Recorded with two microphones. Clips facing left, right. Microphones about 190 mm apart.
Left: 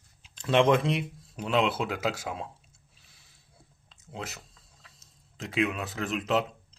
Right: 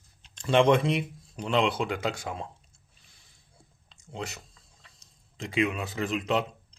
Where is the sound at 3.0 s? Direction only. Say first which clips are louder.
Even; 5° left (ahead or behind).